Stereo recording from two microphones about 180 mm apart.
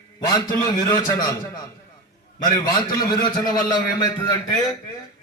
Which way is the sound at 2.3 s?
20° left (ahead or behind).